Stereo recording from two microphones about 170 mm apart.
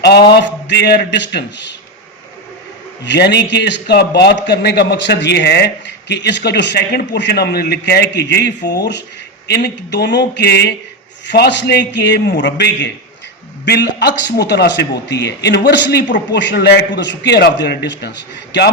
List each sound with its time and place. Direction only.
0.3 s a man's voice: 80° left
3.0 s a man's voice: 85° left
11.3 s a man's voice: 90° left